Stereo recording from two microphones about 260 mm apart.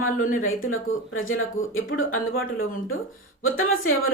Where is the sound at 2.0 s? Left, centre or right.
Left.